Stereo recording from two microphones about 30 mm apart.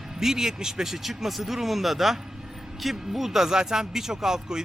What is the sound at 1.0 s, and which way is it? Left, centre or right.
Speech, centre.